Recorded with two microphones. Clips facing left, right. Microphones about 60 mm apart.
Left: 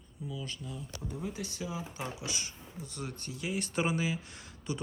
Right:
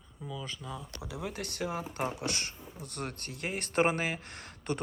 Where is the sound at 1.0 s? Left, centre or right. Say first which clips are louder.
Even; right.